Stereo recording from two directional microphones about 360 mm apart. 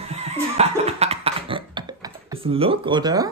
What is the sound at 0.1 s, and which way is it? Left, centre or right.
Cough, centre.